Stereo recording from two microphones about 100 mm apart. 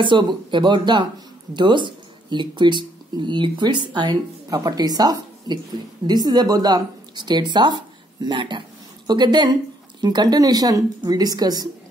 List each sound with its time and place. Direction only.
0.0 s speech: 50° right (ahead or behind)